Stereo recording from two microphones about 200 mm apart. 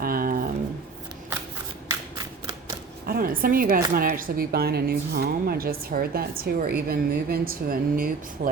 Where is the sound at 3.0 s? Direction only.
45° right (ahead or behind).